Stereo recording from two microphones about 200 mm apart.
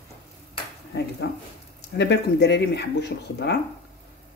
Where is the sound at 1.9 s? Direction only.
60° left (ahead or behind).